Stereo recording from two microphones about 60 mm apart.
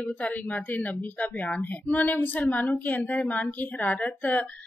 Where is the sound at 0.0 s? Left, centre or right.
Left.